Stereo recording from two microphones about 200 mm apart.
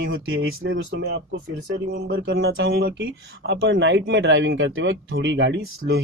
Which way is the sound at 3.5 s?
65° right (ahead or behind).